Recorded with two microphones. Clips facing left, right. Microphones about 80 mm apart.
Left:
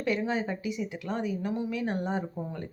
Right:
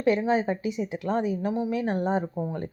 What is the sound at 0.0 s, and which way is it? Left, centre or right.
A woman's voice, right.